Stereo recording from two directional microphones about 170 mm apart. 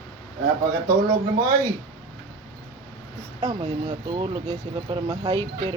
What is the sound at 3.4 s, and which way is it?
Speech, 20° right (ahead or behind).